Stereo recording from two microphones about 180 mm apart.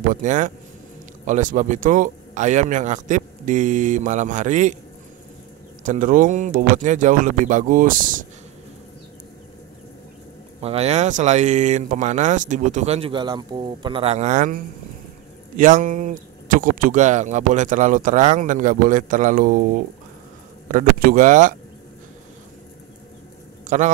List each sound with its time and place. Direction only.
0.1 s speech: 45° right (ahead or behind)
5.9 s speech: 45° right (ahead or behind)
10.6 s speech: 35° right (ahead or behind)
20.6 s speech: 50° right (ahead or behind)
23.7 s speech: 40° right (ahead or behind)